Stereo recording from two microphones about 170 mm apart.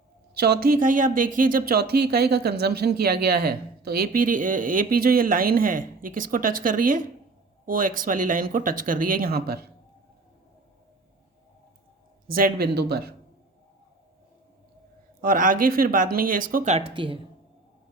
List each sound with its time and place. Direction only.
0.3 s speech: 70° right (ahead or behind)
12.3 s speech: 65° right (ahead or behind)
15.2 s speech: 55° right (ahead or behind)
16.7 s speech: 30° right (ahead or behind)